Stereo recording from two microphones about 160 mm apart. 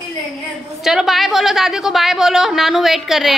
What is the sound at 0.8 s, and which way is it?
A woman's voice, centre (ahead or behind).